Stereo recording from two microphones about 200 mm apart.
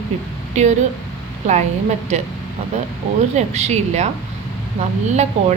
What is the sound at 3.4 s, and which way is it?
Speech, 35° right (ahead or behind).